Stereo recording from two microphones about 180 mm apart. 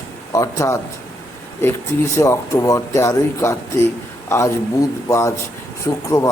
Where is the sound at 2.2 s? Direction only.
15° left (ahead or behind).